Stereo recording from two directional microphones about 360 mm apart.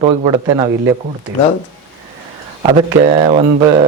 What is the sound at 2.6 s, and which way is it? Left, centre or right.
Speech, centre.